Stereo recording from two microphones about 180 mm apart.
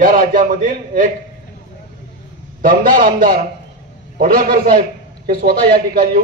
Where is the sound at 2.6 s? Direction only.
50° right (ahead or behind).